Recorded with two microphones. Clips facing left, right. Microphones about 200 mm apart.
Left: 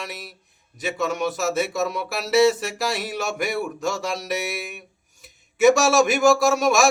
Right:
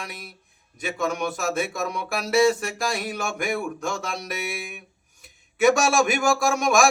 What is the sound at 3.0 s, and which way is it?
Speech, 50° right (ahead or behind).